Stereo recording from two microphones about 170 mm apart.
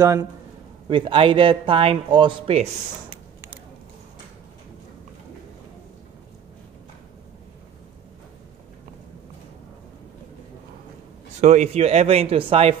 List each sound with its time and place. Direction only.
0.0 s a man's voice: 15° right (ahead or behind)
0.8 s speech: 30° right (ahead or behind)
11.4 s speech: 40° right (ahead or behind)